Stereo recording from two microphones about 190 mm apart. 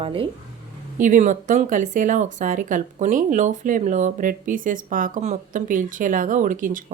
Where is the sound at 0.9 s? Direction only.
45° right (ahead or behind).